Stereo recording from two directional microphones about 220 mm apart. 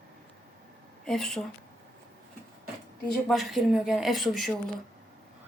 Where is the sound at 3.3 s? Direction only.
Centre (ahead or behind).